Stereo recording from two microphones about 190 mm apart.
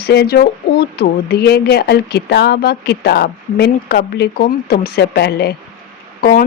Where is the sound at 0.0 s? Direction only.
55° left (ahead or behind).